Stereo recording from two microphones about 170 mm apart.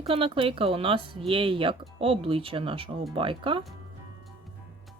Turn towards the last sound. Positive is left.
turn(degrees=-30)  # may be behind; listen again after turning